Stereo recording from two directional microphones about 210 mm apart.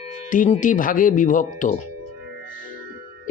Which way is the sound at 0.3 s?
40° left (ahead or behind).